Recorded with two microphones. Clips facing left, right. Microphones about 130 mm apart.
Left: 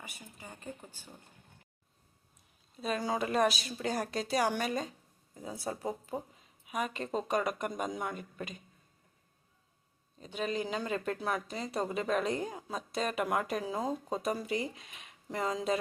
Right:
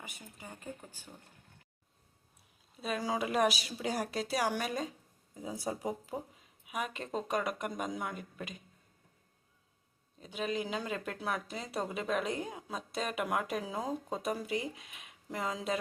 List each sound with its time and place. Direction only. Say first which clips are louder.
0.0 s speech: even; 15° right (ahead or behind)
2.8 s speech: left 1 dB; 5° right (ahead or behind)
10.2 s speech: left 1 dB; 5° right (ahead or behind)